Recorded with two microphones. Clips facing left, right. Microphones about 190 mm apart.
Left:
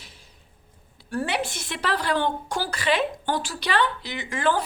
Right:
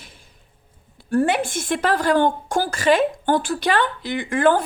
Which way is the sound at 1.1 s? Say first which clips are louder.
Right 8 dB; 50° right (ahead or behind).